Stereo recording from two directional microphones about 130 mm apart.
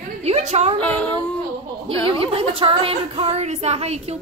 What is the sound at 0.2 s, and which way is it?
Speech, 55° right (ahead or behind).